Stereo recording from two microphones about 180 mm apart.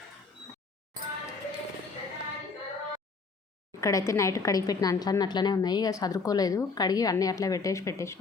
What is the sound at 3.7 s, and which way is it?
A woman's voice, 15° left (ahead or behind).